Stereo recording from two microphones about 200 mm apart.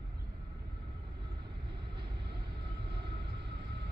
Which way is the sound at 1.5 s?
55° right (ahead or behind).